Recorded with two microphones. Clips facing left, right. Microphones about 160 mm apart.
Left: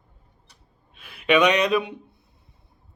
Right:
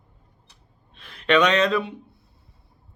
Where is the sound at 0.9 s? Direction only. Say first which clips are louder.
Even; 10° left (ahead or behind).